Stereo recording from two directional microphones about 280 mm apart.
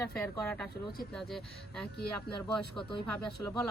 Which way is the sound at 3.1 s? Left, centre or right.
Centre.